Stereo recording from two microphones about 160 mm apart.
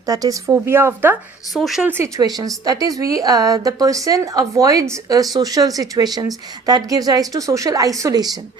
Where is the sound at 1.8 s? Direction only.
15° right (ahead or behind).